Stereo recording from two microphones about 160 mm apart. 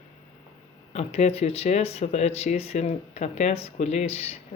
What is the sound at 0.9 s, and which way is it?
Speech, 45° left (ahead or behind).